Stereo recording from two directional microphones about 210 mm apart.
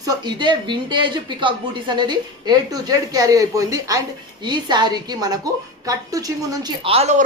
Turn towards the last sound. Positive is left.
turn(degrees=-30)  # may be behind; listen again after turning